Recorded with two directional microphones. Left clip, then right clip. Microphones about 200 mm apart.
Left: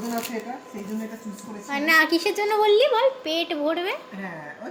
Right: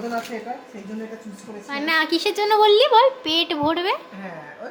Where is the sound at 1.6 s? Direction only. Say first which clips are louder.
Left 2 dB; centre (ahead or behind); by 3.9 s 20° right (ahead or behind).